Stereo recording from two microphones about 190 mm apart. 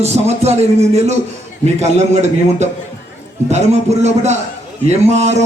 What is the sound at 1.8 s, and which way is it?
A man's voice, 35° right (ahead or behind).